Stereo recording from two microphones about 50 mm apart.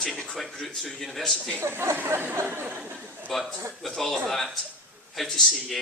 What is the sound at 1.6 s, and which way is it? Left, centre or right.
Speech, right.